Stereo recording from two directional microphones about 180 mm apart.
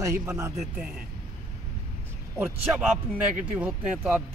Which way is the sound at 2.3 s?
10° right (ahead or behind).